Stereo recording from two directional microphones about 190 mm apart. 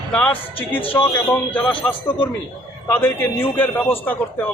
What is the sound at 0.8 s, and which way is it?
Speech, 30° left (ahead or behind).